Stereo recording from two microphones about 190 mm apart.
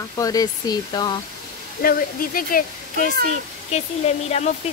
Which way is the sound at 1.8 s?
50° left (ahead or behind).